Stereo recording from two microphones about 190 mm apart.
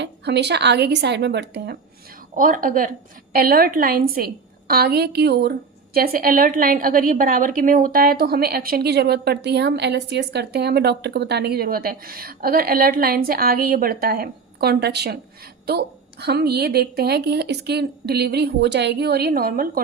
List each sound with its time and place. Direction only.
0.0 s a woman's voice: 60° right (ahead or behind)
2.3 s a woman's voice: 45° right (ahead or behind)